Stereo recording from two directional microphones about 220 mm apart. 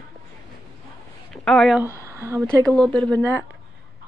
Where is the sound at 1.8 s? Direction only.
15° right (ahead or behind).